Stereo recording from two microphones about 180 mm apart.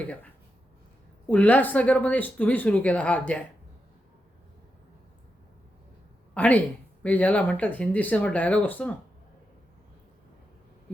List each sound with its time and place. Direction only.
1.3 s speech: 10° left (ahead or behind)
6.3 s speech: 10° left (ahead or behind)